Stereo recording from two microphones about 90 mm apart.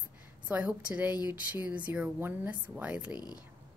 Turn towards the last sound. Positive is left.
turn(degrees=50)  # may be behind; listen again after turning